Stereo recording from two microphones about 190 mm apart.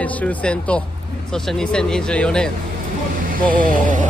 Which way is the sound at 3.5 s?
45° right (ahead or behind).